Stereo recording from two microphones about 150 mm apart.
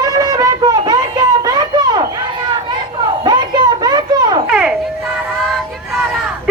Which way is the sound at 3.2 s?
30° right (ahead or behind).